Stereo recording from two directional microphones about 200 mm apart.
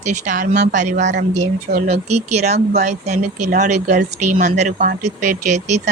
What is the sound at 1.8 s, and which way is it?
Speech, 30° right (ahead or behind).